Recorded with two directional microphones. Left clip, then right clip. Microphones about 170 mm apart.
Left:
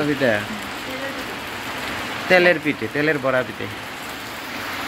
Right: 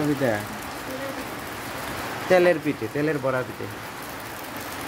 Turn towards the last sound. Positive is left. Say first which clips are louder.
# left 5 dB
turn(degrees=5)  # may be behind; listen again after turning